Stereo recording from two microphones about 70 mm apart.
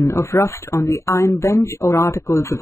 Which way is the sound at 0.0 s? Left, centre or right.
Left.